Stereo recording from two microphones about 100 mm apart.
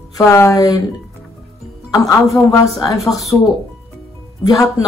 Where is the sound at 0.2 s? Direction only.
30° left (ahead or behind).